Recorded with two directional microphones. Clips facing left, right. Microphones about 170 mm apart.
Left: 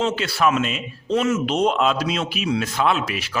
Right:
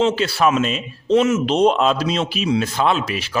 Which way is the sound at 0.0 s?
30° right (ahead or behind).